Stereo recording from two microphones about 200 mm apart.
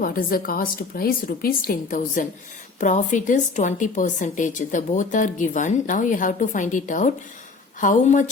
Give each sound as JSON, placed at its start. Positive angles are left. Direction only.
{"t": 0.0, "sound": "a woman's voice", "side_deg": 45}